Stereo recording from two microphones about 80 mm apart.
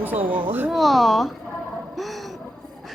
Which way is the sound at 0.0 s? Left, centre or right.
Right.